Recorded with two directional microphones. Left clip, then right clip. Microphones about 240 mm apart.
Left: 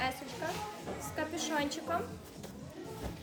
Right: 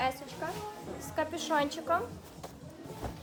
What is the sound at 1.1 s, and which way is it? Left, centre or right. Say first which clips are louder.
Speech: right 5 dB; centre.